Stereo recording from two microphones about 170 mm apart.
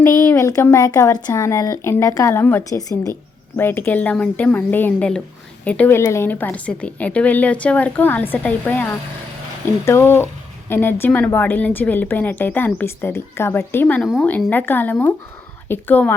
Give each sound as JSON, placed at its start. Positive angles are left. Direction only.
{"t": 0.0, "sound": "speech", "side_deg": 15}